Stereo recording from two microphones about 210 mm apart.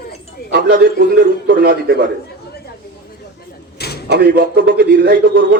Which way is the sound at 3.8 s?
50° left (ahead or behind).